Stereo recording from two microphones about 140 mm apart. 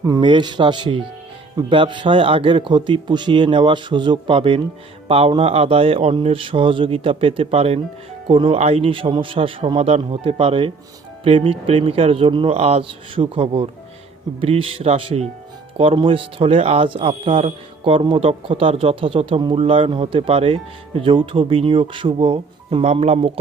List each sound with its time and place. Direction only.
0.0 s speech: 30° right (ahead or behind); by 23.4 s 45° right (ahead or behind)